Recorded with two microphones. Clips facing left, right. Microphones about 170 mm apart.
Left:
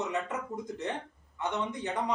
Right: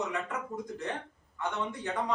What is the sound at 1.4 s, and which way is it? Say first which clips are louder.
Speech: left 1 dB; 20° left (ahead or behind).